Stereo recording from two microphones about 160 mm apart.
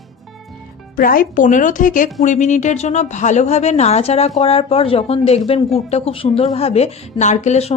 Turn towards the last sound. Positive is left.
turn(degrees=45)  # may be behind; listen again after turning